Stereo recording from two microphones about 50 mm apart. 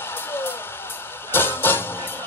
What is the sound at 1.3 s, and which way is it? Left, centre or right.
Music, left.